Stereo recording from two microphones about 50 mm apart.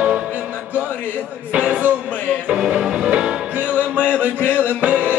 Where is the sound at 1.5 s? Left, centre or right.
Right.